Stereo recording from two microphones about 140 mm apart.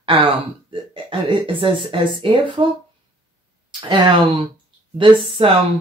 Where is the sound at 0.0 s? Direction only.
35° right (ahead or behind).